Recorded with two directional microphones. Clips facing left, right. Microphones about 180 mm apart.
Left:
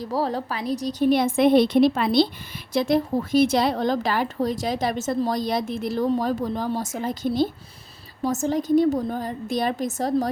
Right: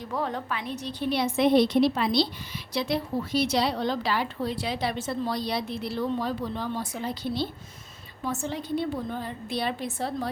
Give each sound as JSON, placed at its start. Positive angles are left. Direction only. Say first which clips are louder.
{"t": 0.0, "sound": "a woman's voice", "louder": "left 5 dB", "side_deg": 35}